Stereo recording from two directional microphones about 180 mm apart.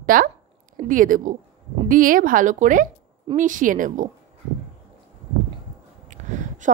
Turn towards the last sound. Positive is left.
turn(degrees=-45)  # may be behind; listen again after turning